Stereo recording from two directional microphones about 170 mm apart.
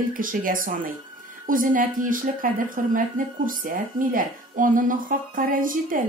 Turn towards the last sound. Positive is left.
turn(degrees=-55)  # may be behind; listen again after turning